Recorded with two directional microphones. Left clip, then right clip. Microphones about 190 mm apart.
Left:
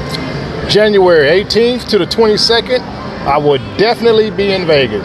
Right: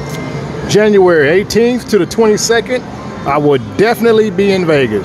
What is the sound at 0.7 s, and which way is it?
Speech, 35° right (ahead or behind).